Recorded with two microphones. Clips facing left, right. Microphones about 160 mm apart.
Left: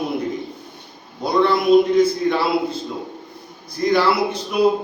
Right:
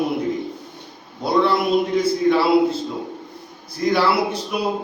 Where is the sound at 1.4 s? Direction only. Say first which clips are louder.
Left 8 dB; 5° right (ahead or behind).